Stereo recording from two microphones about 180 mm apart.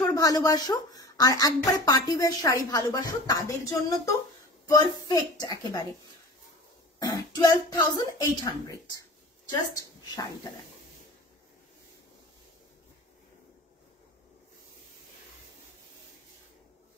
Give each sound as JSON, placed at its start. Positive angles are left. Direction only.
{"t": 0.0, "sound": "a woman's voice", "side_deg": 20}
{"t": 4.6, "sound": "speech", "side_deg": 20}
{"t": 7.0, "sound": "a woman's voice", "side_deg": 20}